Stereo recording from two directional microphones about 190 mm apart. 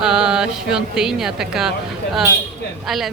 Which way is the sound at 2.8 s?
Centre (ahead or behind).